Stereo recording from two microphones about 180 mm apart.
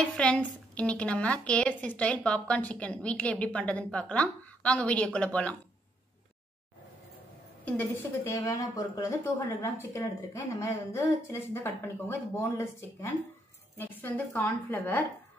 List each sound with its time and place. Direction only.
0.2 s a woman's voice: 5° left (ahead or behind)
7.6 s a woman's voice: 10° left (ahead or behind)